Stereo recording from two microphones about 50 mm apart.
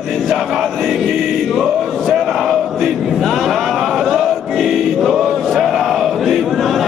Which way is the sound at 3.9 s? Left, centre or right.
Centre.